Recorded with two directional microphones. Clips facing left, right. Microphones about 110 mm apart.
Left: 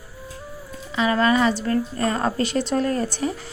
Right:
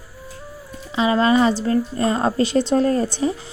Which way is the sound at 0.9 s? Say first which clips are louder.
Right 3 dB; 30° right (ahead or behind).